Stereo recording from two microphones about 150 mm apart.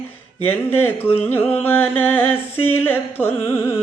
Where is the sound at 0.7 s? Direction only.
15° left (ahead or behind).